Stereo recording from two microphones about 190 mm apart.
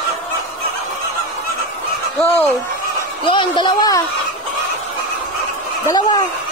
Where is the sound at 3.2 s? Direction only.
25° left (ahead or behind).